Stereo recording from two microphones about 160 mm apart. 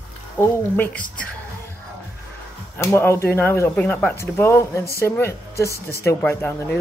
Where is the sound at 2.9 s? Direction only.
15° left (ahead or behind).